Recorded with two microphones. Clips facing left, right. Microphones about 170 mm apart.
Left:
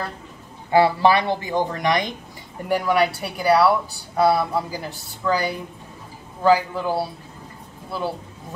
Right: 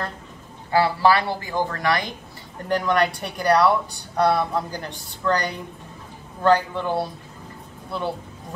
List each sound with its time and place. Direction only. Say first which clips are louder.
0.7 s a woman's voice: left 2 dB; 20° left (ahead or behind); by 8.1 s 5° left (ahead or behind)